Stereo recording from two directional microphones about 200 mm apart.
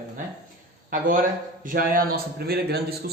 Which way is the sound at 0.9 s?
45° right (ahead or behind).